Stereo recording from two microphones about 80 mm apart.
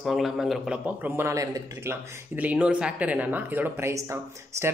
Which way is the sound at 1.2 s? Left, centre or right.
Right.